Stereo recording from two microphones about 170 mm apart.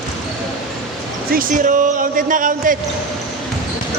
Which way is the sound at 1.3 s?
55° right (ahead or behind).